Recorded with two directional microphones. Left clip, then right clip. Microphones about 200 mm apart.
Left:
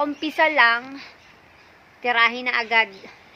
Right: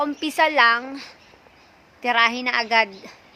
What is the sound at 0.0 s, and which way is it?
A woman's voice, 15° right (ahead or behind).